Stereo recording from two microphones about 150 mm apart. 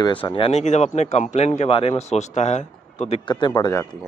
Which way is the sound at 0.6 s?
50° left (ahead or behind).